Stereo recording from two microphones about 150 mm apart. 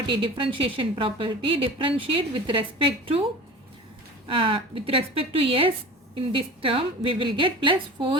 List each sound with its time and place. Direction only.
0.1 s a woman's voice: 35° right (ahead or behind)
4.3 s a woman's voice: 35° right (ahead or behind)